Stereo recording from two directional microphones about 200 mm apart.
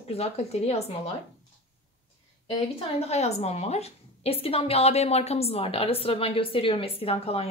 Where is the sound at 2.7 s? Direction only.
30° left (ahead or behind).